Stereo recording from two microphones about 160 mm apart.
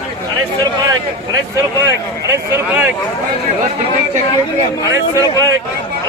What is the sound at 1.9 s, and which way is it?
Speech, 15° right (ahead or behind).